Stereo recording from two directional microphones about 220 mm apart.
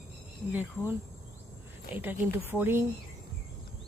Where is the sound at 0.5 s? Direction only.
10° right (ahead or behind).